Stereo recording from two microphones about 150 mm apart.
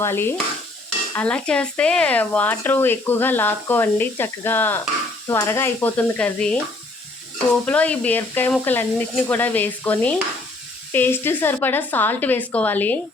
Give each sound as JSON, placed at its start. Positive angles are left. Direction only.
{"t": 0.0, "sound": "speech", "side_deg": 15}
{"t": 7.6, "sound": "speech", "side_deg": 10}